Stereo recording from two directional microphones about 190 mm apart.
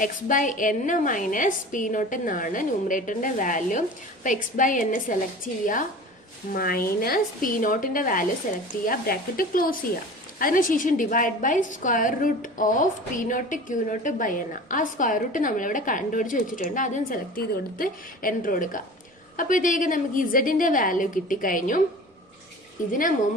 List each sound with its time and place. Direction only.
0.0 s a woman's voice: 45° left (ahead or behind)
6.5 s a woman's voice: 50° left (ahead or behind)
22.9 s a woman's voice: 45° left (ahead or behind)